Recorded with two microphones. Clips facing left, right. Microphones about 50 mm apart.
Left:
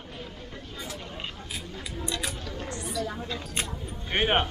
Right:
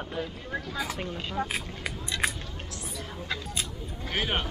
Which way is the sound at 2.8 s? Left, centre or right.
Left.